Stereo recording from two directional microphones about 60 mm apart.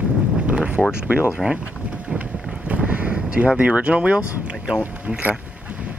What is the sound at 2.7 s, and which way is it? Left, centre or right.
Vehicle, right.